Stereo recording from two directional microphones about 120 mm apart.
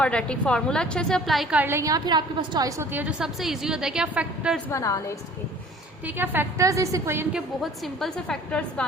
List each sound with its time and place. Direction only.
0.0 s a woman's voice: 10° left (ahead or behind)
1.5 s a woman's voice: 20° right (ahead or behind)
2.9 s a woman's voice: 10° right (ahead or behind)
4.7 s a woman's voice: 25° left (ahead or behind)
6.1 s a woman's voice: 15° right (ahead or behind)
7.3 s a woman's voice: centre (ahead or behind)